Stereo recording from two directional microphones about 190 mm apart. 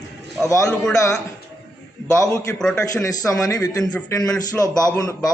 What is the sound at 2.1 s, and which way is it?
A man's voice, 15° left (ahead or behind).